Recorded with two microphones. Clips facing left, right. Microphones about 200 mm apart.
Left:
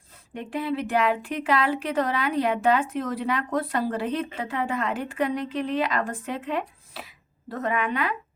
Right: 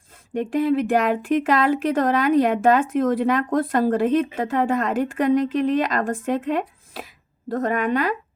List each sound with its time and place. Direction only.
0.3 s speech: 45° right (ahead or behind)